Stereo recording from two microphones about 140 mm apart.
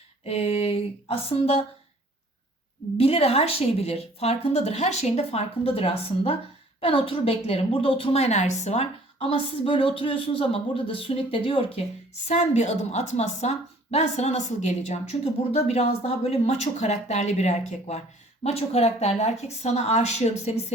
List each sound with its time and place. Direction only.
0.3 s a woman's voice: 45° left (ahead or behind)
3.0 s a woman's voice: 45° left (ahead or behind)
9.3 s speech: 40° left (ahead or behind)
12.3 s a woman's voice: 55° left (ahead or behind)